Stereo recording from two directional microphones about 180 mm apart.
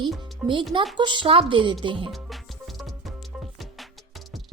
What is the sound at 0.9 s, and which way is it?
Speech, 25° right (ahead or behind).